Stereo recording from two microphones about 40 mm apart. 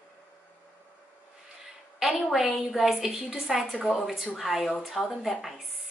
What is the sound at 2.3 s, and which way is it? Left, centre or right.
A woman's voice, centre.